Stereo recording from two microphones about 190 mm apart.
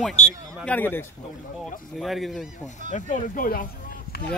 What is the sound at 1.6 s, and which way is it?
Speech, centre (ahead or behind).